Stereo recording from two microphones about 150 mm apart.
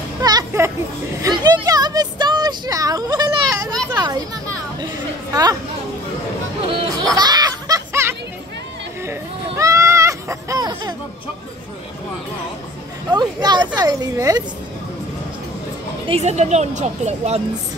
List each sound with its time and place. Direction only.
0.2 s a sound: 25° right (ahead or behind)
3.9 s children playing: 25° right (ahead or behind)
5.3 s speech: 25° right (ahead or behind)
7.2 s music: 25° right (ahead or behind)
9.6 s a sound: 20° right (ahead or behind)
13.1 s speech: 30° right (ahead or behind)
16.1 s speech: 45° right (ahead or behind)